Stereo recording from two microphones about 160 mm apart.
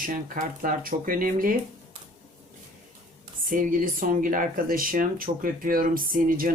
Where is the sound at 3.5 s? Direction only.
60° right (ahead or behind).